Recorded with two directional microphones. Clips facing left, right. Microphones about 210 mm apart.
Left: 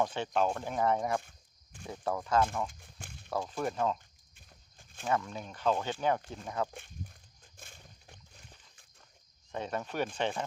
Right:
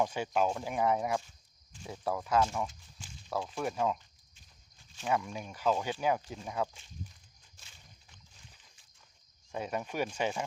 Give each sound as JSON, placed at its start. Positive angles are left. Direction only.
{"t": 0.0, "sound": "speech", "side_deg": -10}
{"t": 2.6, "sound": "speech", "side_deg": 60}
{"t": 3.2, "sound": "speech", "side_deg": 0}
{"t": 4.4, "sound": "walk", "side_deg": 55}
{"t": 5.0, "sound": "speech", "side_deg": -10}
{"t": 6.7, "sound": "a sound", "side_deg": 55}
{"t": 9.5, "sound": "speech", "side_deg": -10}